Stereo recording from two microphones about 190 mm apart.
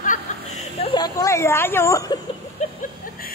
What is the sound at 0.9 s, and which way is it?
Speech, 20° left (ahead or behind).